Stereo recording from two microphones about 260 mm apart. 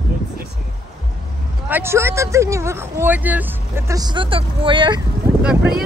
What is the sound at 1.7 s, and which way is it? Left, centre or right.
Speech, centre.